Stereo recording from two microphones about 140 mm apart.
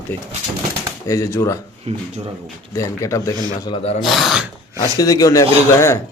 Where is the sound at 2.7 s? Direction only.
20° left (ahead or behind).